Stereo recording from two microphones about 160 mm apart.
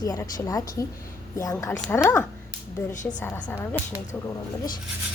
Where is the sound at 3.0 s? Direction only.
15° left (ahead or behind).